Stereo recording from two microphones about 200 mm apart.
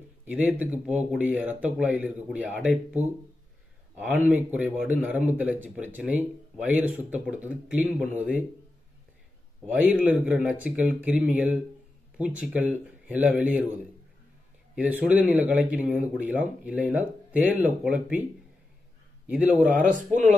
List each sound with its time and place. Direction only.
0.2 s speech: 10° right (ahead or behind)
4.3 s speech: 10° right (ahead or behind)
9.8 s speech: 5° right (ahead or behind)
14.8 s speech: 10° right (ahead or behind)
19.2 s speech: 10° right (ahead or behind)
19.9 s speech: 35° right (ahead or behind)